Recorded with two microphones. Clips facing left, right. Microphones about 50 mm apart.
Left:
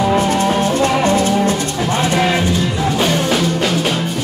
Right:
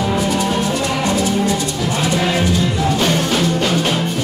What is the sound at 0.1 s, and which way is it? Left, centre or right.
Music, left.